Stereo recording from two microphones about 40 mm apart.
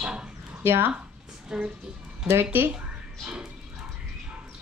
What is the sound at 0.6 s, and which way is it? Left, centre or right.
Speech, right.